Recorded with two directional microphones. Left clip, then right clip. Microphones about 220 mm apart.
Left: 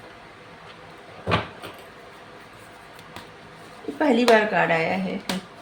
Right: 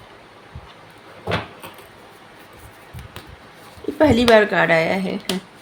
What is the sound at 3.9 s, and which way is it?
Speech, 55° right (ahead or behind).